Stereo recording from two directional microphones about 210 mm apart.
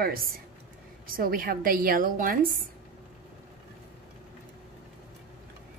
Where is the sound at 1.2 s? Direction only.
45° right (ahead or behind).